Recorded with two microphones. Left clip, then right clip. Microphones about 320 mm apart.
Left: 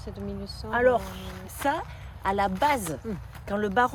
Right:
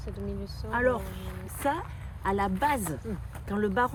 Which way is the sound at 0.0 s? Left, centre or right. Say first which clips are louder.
Left 1 dB; left.